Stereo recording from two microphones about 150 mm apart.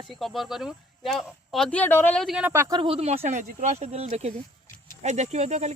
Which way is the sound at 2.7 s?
30° right (ahead or behind).